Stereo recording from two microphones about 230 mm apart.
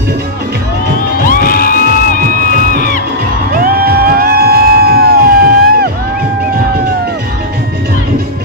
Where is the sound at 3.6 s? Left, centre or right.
Right.